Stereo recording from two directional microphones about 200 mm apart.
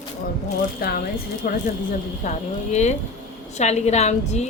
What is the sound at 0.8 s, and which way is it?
Speech, 50° left (ahead or behind).